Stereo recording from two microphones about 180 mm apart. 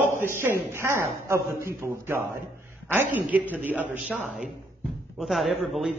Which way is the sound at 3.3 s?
10° right (ahead or behind).